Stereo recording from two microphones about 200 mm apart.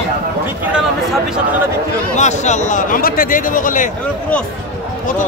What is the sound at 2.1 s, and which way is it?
Speech, 35° left (ahead or behind).